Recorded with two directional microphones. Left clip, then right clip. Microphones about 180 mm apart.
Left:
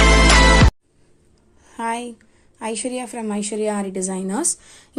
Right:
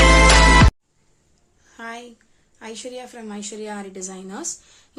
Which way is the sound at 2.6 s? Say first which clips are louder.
Left 8 dB; 40° left (ahead or behind).